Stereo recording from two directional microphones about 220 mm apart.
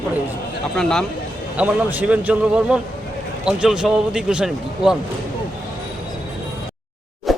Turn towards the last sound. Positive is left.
turn(degrees=0)  # may be behind; listen again after turning